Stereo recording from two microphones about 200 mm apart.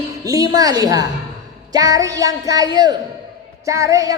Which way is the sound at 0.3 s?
20° right (ahead or behind).